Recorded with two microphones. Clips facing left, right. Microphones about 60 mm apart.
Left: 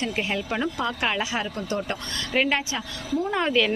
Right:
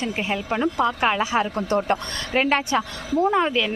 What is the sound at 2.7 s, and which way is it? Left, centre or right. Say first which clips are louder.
Speech: right 6 dB; right.